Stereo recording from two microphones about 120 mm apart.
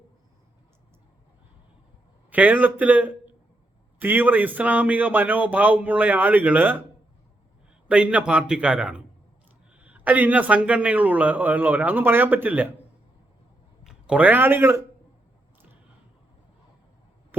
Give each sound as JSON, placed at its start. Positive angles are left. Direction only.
{"t": 2.3, "sound": "speech", "side_deg": -15}
{"t": 7.9, "sound": "speech", "side_deg": -10}
{"t": 13.8, "sound": "speech", "side_deg": -10}